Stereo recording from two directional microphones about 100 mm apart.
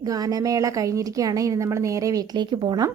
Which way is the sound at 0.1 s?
35° right (ahead or behind).